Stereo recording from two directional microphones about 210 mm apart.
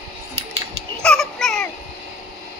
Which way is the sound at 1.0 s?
5° left (ahead or behind).